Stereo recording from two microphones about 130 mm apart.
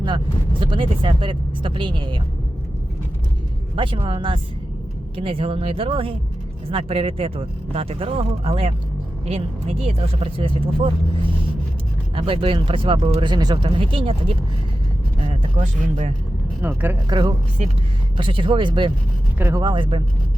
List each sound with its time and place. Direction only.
0.6 s speech: 40° right (ahead or behind)
3.8 s speech: 45° right (ahead or behind)
12.1 s speech: 45° right (ahead or behind)
15.5 s speech: 65° right (ahead or behind)
16.6 s speech: 15° right (ahead or behind)
17.1 s speech: 35° right (ahead or behind)
19.4 s speech: 20° right (ahead or behind)
19.6 s speech: 40° right (ahead or behind)